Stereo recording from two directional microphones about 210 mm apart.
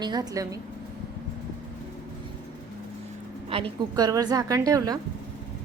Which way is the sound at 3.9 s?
15° right (ahead or behind).